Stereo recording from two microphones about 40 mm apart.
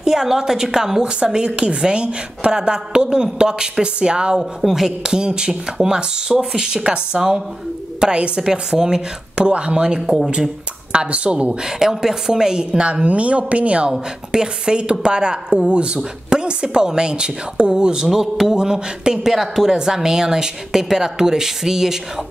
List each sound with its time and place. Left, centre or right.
0.0 s a woman's voice: centre
4.4 s a woman's voice: centre; by 11.5 s right
11.6 s a woman's voice: centre
18.0 s a woman's voice: centre